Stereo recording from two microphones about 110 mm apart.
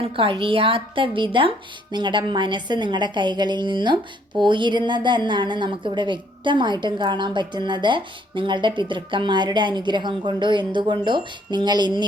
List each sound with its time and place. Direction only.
0.0 s a woman's voice: 55° right (ahead or behind)